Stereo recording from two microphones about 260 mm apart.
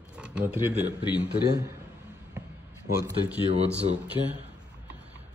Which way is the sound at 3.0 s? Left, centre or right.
Centre.